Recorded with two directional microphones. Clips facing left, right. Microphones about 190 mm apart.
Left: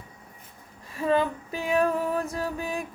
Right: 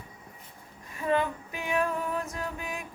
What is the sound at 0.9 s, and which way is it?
Female singing, 30° left (ahead or behind).